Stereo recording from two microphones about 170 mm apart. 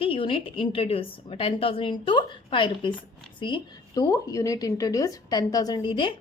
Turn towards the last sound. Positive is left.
turn(degrees=30)  # may be behind; listen again after turning